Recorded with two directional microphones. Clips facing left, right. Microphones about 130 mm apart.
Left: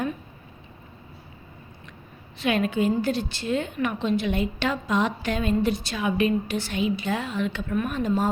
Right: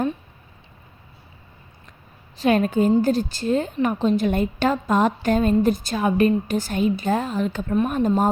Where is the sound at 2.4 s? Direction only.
40° right (ahead or behind).